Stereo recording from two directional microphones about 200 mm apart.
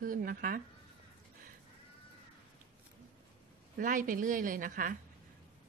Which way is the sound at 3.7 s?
40° right (ahead or behind).